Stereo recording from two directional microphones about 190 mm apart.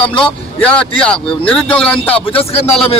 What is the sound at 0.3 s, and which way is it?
Speech, 5° left (ahead or behind).